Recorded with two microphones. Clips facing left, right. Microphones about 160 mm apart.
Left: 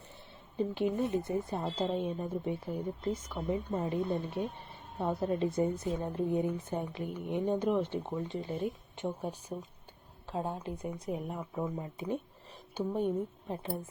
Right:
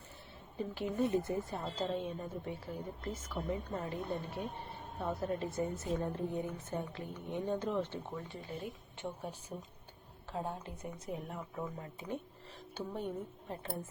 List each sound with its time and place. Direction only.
0.5 s a woman's voice: 20° left (ahead or behind)